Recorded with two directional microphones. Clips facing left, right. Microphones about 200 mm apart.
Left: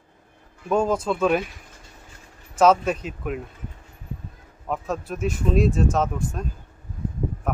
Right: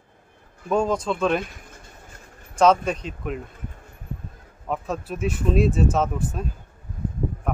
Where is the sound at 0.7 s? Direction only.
5° left (ahead or behind).